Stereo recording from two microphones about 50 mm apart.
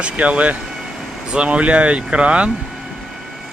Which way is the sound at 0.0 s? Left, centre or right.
Right.